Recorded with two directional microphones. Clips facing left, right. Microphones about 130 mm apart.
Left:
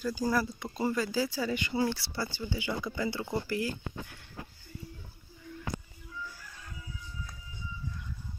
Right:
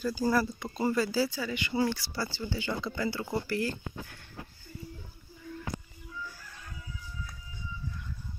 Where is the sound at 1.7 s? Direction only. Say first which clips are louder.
Right 3 dB; 20° left (ahead or behind).